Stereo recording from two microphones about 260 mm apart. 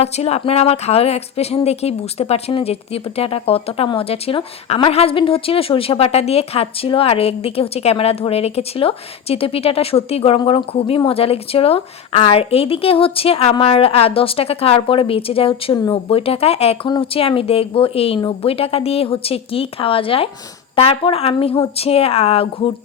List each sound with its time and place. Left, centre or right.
0.0 s speech: left